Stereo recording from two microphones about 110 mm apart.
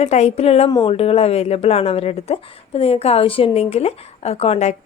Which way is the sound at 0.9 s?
60° left (ahead or behind).